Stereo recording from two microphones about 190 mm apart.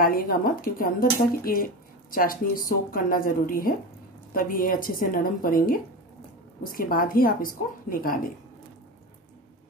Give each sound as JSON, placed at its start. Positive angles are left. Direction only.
{"t": 0.0, "sound": "speech", "side_deg": 50}